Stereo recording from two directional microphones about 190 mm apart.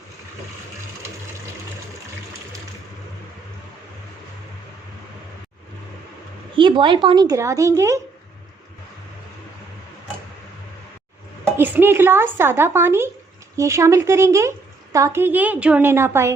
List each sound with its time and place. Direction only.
6.6 s a woman's voice: 25° right (ahead or behind)
11.5 s speech: 10° right (ahead or behind)